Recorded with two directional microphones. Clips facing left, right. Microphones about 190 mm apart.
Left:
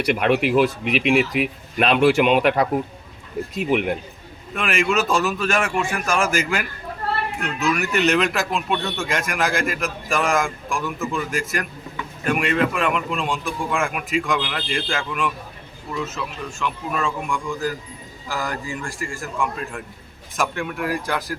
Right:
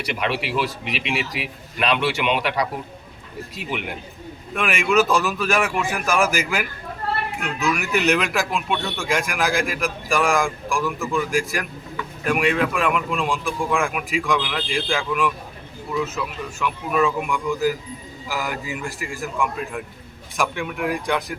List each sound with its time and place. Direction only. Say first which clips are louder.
0.0 s speech: left 7 dB; 50° left (ahead or behind)
4.5 s speech: right 2 dB; centre (ahead or behind)
16.6 s speech: right 4 dB; 5° right (ahead or behind)